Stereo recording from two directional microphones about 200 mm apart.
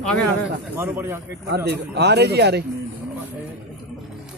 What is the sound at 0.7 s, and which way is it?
Speech, 10° right (ahead or behind).